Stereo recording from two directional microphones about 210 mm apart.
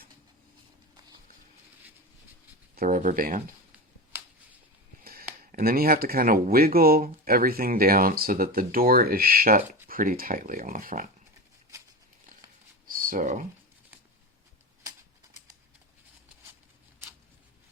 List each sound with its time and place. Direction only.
2.7 s speech: 40° right (ahead or behind)
5.4 s speech: 40° right (ahead or behind)
13.0 s speech: 40° right (ahead or behind)